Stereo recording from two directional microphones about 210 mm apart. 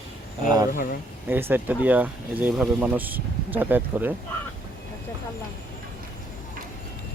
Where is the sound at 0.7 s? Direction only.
45° left (ahead or behind).